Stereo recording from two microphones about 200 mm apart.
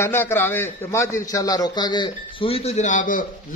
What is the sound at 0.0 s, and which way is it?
A man's voice, 10° left (ahead or behind).